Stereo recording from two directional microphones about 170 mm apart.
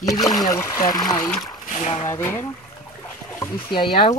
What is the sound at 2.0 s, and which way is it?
Speech, 15° left (ahead or behind).